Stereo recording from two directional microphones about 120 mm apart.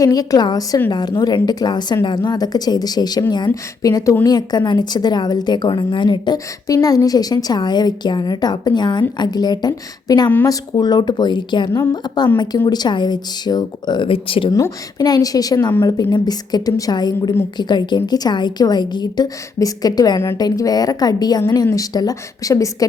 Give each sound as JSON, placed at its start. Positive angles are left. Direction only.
{"t": 0.0, "sound": "a woman's voice", "side_deg": 30}
{"t": 10.2, "sound": "speech", "side_deg": 15}
{"t": 10.5, "sound": "a woman's voice", "side_deg": 35}
{"t": 11.7, "sound": "a woman's voice", "side_deg": 25}
{"t": 14.5, "sound": "a woman's voice", "side_deg": 30}